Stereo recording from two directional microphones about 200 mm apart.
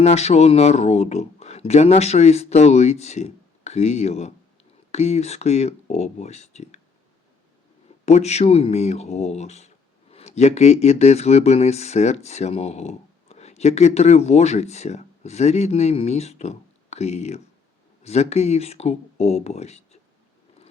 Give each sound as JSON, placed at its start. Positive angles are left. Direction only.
{"t": 0.0, "sound": "speech", "side_deg": 35}
{"t": 8.0, "sound": "speech", "side_deg": 35}